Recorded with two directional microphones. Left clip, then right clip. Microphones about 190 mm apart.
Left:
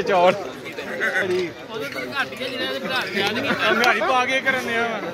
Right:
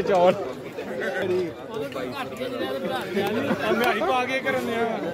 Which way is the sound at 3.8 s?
10° left (ahead or behind).